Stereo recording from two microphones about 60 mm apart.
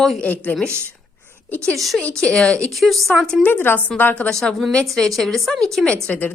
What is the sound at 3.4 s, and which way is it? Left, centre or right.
Speech, left.